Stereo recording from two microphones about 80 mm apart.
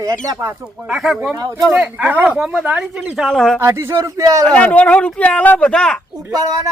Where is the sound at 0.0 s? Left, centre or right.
Right.